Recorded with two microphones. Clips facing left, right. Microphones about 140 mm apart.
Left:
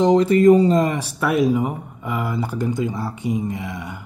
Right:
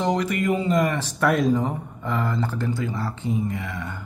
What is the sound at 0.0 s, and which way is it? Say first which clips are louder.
Speech: left 10 dB; 25° left (ahead or behind).